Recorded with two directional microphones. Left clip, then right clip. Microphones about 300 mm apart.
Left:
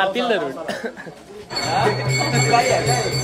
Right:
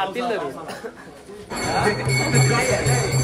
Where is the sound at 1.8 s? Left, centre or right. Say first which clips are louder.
Left 1 dB; left.